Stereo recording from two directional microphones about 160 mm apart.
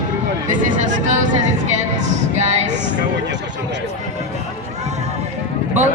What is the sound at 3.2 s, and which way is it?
Speech, 90° right.